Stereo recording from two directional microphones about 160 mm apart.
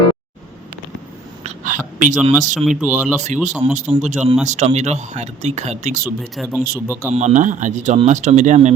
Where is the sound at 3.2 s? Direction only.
50° right (ahead or behind).